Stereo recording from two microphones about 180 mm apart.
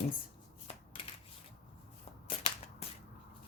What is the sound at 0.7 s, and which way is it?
Shuffling cards, 35° left (ahead or behind).